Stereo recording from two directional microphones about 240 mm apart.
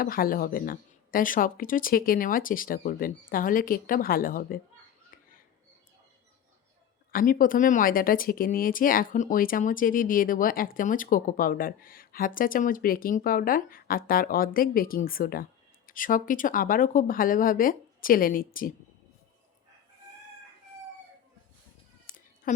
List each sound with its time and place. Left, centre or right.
0.0 s a woman's voice: left
7.1 s a woman's voice: left
22.1 s a sound: left